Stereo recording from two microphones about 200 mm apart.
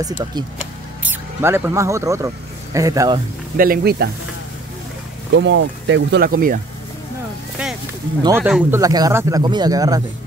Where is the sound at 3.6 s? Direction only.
50° right (ahead or behind).